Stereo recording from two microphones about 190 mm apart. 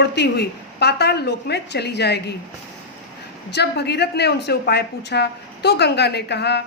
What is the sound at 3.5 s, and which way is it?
A woman's voice, 60° left (ahead or behind).